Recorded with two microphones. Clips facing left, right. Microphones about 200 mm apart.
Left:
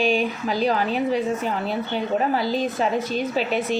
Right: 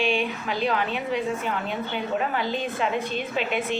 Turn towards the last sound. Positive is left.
turn(degrees=40)  # may be behind; listen again after turning